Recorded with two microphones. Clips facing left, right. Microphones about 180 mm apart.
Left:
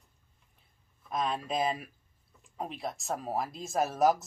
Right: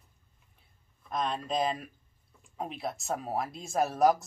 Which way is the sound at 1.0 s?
5° left (ahead or behind).